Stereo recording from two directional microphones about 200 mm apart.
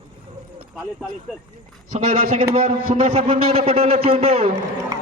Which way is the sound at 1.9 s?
30° right (ahead or behind).